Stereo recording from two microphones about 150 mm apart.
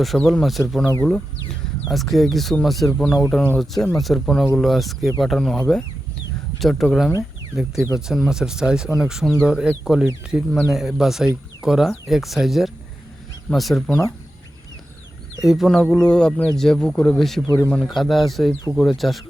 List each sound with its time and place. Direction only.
0.0 s speech: centre (ahead or behind)
1.9 s speech: centre (ahead or behind)
6.6 s speech: centre (ahead or behind)
15.4 s speech: 5° right (ahead or behind)
17.4 s a man's voice: 20° left (ahead or behind)
17.7 s speech: 5° left (ahead or behind)